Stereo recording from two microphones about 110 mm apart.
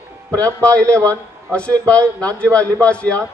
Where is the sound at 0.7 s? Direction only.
10° left (ahead or behind).